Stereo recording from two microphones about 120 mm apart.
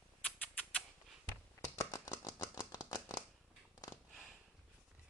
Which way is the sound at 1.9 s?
35° left (ahead or behind).